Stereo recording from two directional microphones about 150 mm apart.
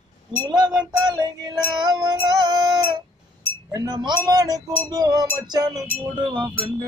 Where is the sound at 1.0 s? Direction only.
25° right (ahead or behind).